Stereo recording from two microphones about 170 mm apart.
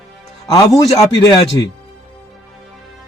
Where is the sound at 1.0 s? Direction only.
30° left (ahead or behind).